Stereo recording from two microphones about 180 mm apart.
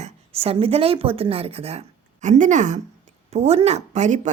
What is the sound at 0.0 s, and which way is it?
A woman's voice, 35° right (ahead or behind).